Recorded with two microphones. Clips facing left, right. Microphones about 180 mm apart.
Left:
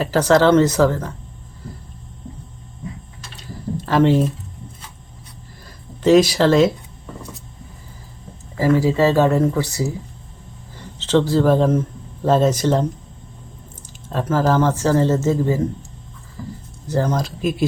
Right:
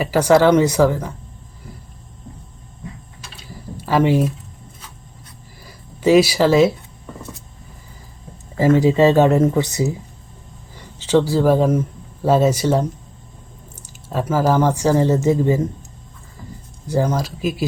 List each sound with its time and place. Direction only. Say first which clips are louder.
0.0 s speech: right 1 dB; 10° right (ahead or behind)
3.3 s a sound: left 8 dB; 10° right (ahead or behind)
5.6 s speech: even; 10° right (ahead or behind)
8.5 s speech: right 2 dB; 20° right (ahead or behind)
14.1 s speech: even; 10° right (ahead or behind)
16.8 s speech: right 1 dB; 10° right (ahead or behind)